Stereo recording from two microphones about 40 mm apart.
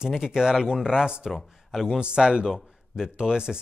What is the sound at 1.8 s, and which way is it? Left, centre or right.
Speech, right.